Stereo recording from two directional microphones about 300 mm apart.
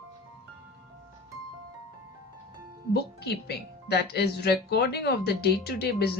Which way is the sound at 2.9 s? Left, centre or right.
Left.